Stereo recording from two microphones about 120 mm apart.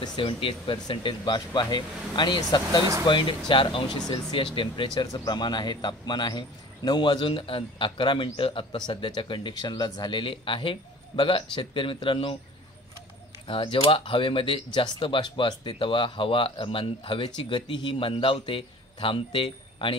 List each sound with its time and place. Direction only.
0.0 s speech: 40° left (ahead or behind)
13.5 s speech: 45° left (ahead or behind)